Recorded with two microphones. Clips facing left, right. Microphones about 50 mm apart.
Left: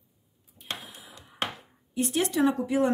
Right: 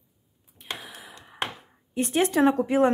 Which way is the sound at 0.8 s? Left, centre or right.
Right.